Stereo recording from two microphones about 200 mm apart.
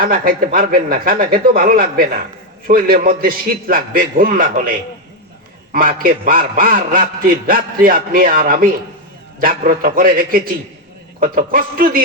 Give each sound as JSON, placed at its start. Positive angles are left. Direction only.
{"t": 0.0, "sound": "a man's voice", "side_deg": -45}
{"t": 5.7, "sound": "a man's voice", "side_deg": -45}